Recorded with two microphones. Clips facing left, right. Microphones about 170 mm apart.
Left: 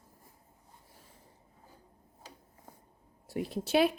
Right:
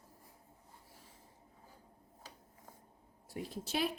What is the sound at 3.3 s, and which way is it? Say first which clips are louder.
Speech: left 10 dB; 70° left (ahead or behind).